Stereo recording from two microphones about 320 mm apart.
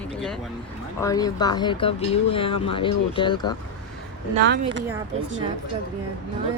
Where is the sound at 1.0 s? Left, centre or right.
Centre.